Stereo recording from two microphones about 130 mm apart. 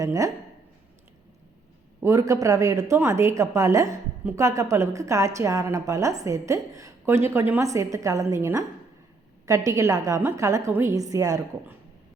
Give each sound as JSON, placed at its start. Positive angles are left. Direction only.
{"t": 0.0, "sound": "a woman's voice", "side_deg": -25}
{"t": 2.0, "sound": "a woman's voice", "side_deg": -25}